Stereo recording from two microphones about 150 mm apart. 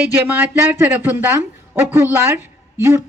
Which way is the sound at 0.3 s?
15° right (ahead or behind).